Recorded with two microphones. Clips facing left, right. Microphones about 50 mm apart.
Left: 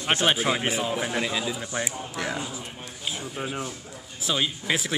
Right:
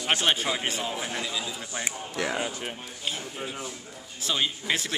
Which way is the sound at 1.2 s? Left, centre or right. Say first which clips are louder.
Left 5 dB; left.